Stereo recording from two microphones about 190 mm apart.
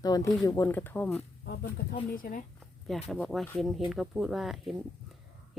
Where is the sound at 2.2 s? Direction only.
45° left (ahead or behind).